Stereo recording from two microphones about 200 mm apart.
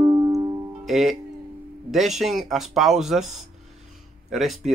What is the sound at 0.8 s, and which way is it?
Speech, centre (ahead or behind).